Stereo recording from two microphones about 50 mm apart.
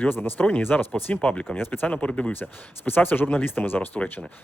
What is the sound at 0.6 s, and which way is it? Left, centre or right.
Speech, left.